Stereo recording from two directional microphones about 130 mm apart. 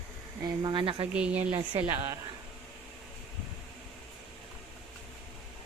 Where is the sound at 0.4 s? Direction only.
35° right (ahead or behind).